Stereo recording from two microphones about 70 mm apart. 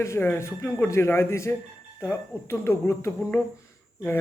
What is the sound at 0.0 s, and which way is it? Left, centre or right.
Speech, left.